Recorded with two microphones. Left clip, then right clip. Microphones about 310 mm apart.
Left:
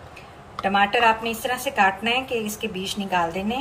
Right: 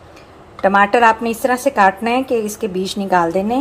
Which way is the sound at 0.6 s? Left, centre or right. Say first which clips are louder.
Right 7 dB; centre.